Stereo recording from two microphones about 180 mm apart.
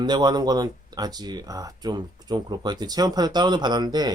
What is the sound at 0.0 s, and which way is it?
Speech, 25° right (ahead or behind).